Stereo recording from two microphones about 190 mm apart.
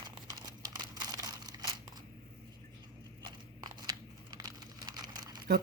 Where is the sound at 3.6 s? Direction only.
20° right (ahead or behind).